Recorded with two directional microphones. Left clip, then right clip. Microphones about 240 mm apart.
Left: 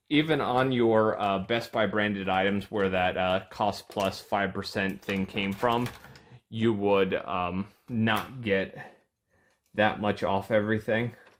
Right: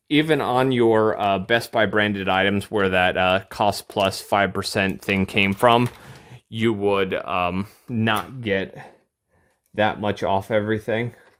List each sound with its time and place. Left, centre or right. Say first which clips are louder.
0.1 s speech: right 6 dB; right